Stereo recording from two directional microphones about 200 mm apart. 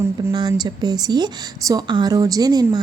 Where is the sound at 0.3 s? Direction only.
20° right (ahead or behind).